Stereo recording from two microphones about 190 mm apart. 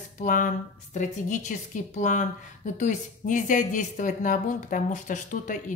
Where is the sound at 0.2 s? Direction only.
45° left (ahead or behind).